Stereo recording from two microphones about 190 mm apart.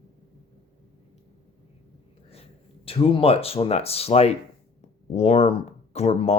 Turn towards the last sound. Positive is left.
turn(degrees=35)  # may be behind; listen again after turning